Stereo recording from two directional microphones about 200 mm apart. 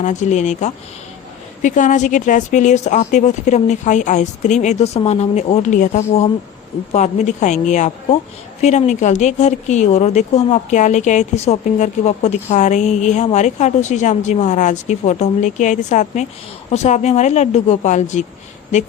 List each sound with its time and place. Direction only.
0.0 s speech: 35° left (ahead or behind)